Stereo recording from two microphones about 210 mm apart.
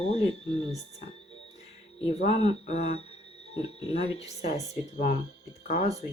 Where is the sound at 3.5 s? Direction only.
20° right (ahead or behind).